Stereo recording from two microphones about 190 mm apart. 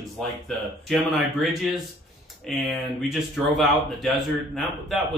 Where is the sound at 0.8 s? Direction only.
Centre (ahead or behind).